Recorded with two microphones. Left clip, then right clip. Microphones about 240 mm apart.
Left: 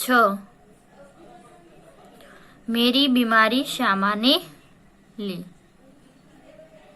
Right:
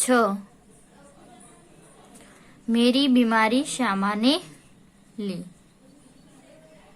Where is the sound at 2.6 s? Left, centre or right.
Centre.